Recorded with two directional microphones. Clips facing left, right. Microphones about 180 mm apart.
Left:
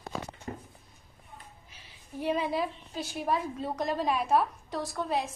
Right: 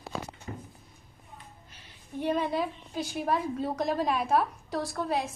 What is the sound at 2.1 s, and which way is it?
A woman's voice, 5° left (ahead or behind).